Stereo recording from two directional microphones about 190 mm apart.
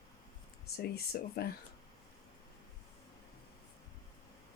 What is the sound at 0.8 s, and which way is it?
Speech, 55° left (ahead or behind).